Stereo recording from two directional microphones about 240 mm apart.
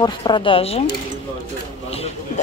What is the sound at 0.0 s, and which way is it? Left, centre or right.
Speech, centre.